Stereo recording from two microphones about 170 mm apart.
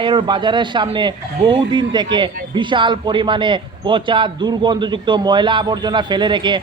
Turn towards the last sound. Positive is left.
turn(degrees=-25)  # may be behind; listen again after turning